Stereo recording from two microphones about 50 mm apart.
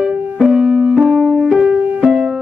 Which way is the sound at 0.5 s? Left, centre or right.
Centre.